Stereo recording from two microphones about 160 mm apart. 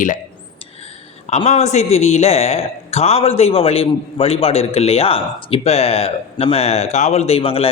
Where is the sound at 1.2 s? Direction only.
45° left (ahead or behind).